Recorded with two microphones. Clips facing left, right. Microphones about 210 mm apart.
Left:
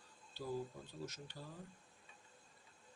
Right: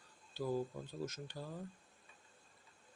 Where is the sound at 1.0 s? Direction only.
45° right (ahead or behind).